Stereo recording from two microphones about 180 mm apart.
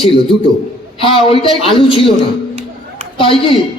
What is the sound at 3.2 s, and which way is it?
Speech, 30° left (ahead or behind).